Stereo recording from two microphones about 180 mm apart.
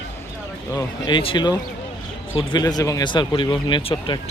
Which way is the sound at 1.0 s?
30° left (ahead or behind).